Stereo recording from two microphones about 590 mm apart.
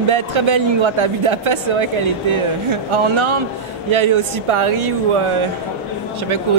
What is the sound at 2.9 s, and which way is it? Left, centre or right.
Speech, right.